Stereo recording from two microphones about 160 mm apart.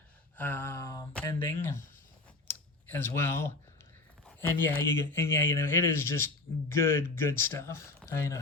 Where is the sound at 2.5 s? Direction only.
15° left (ahead or behind).